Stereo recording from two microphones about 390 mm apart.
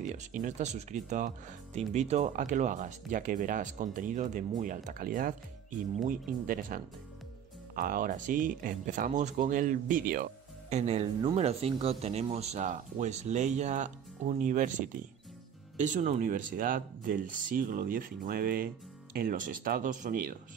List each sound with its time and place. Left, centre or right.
0.0 s speech: centre
15.8 s speech: centre